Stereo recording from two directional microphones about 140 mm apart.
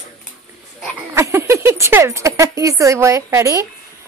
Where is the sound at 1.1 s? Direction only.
20° right (ahead or behind).